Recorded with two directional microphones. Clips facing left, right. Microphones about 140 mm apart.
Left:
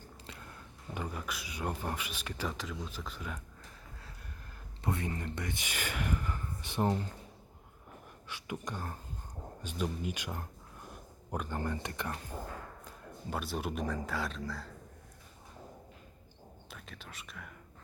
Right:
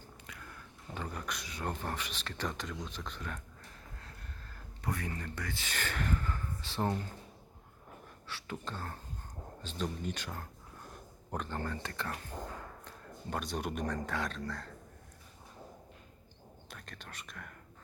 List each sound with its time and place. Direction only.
0.3 s a sound: 25° left (ahead or behind)
0.9 s speech: 5° left (ahead or behind)
4.8 s speech: 25° left (ahead or behind)
8.3 s speech: 15° left (ahead or behind)
13.3 s speech: 5° left (ahead or behind)
16.6 s speech: centre (ahead or behind)